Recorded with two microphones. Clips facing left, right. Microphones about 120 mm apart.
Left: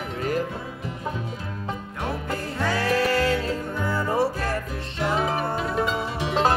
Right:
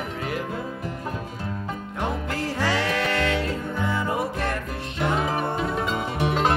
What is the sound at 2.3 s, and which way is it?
Music, 85° right.